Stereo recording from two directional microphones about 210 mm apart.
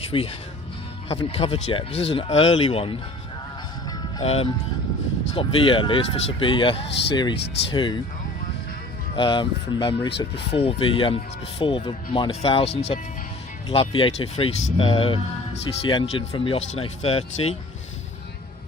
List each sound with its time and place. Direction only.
0.0 s speech: 25° left (ahead or behind)
4.2 s speech: 30° left (ahead or behind)
9.1 s speech: 25° left (ahead or behind)